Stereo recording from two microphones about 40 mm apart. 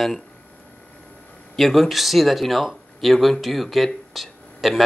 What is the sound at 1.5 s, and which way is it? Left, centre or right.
Speech, centre.